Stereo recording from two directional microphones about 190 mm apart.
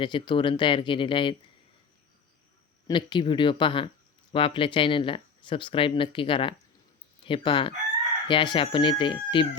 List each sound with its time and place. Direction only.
0.0 s speech: 25° left (ahead or behind)
2.8 s speech: 25° left (ahead or behind)